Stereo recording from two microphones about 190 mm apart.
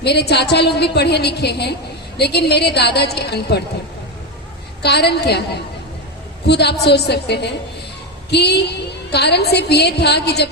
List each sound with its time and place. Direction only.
0.0 s a woman's voice: 60° left (ahead or behind)
4.8 s a woman's voice: 60° left (ahead or behind)